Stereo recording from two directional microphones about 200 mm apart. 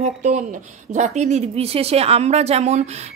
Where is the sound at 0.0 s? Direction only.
35° right (ahead or behind).